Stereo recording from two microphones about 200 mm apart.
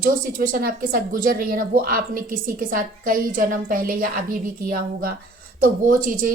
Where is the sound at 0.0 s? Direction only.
45° right (ahead or behind).